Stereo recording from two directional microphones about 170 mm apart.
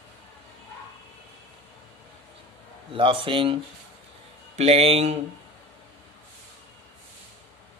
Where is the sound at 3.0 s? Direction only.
30° right (ahead or behind).